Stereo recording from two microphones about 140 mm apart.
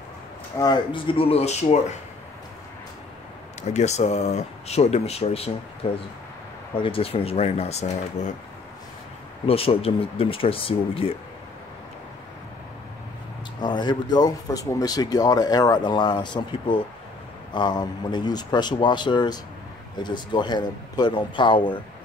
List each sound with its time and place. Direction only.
0.6 s speech: 30° left (ahead or behind)
1.1 s speech: 50° left (ahead or behind)
3.6 s speech: 55° left (ahead or behind)
9.5 s speech: 45° left (ahead or behind)
13.6 s speech: 30° left (ahead or behind)